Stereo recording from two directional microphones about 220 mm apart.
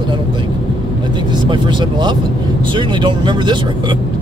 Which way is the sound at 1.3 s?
20° right (ahead or behind).